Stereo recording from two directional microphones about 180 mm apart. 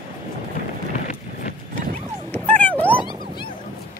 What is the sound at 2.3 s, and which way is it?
Dog, 10° left (ahead or behind).